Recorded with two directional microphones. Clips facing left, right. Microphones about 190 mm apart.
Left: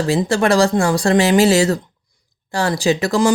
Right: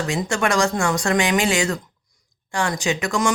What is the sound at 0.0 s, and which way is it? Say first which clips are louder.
Speech: left 6 dB; 35° left (ahead or behind).